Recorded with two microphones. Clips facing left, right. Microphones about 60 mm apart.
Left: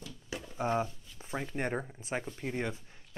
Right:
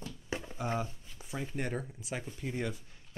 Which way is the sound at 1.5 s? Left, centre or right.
Left.